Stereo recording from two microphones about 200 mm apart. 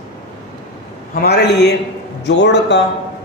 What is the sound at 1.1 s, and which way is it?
A man's voice, 55° left (ahead or behind).